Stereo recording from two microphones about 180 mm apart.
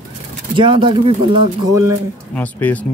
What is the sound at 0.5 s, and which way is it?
Speech, 25° right (ahead or behind).